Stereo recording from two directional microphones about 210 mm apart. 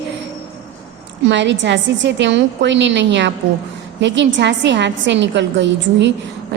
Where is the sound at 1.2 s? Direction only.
60° right (ahead or behind).